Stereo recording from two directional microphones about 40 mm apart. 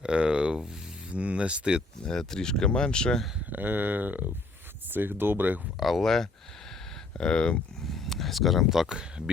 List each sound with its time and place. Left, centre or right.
0.0 s a sound: right
2.1 s speech: centre
3.5 s speech: right
4.9 s speech: right
5.8 s speech: centre
7.2 s speech: left
7.9 s speech: centre
9.0 s speech: right